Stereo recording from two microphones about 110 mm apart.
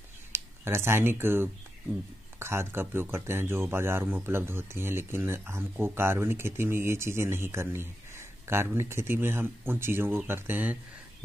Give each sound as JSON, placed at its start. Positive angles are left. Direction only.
{"t": 0.3, "sound": "a man's voice", "side_deg": -25}